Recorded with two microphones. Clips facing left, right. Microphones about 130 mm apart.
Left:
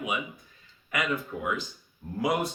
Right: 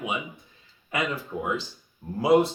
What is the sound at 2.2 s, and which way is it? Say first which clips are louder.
Speech: right 8 dB; 30° right (ahead or behind).